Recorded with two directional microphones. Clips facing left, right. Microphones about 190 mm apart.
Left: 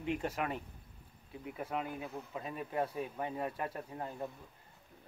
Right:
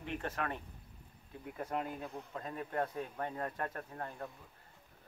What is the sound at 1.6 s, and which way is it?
Speech, 5° left (ahead or behind).